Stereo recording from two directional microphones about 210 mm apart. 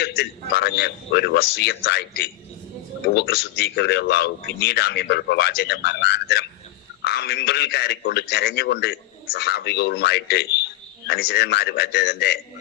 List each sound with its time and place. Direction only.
0.2 s a man's voice: 50° left (ahead or behind)